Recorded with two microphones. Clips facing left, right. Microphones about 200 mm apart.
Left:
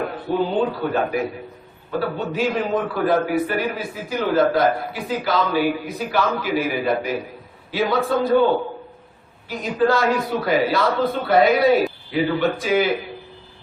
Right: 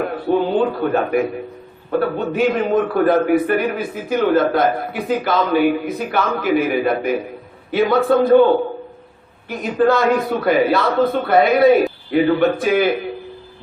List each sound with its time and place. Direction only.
0.3 s a man's voice: 50° right (ahead or behind)
9.5 s a man's voice: 55° right (ahead or behind)